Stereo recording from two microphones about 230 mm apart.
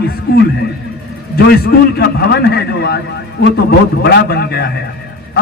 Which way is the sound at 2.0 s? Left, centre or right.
Left.